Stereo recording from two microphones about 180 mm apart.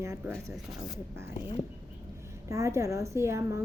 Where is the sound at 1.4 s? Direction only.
25° left (ahead or behind).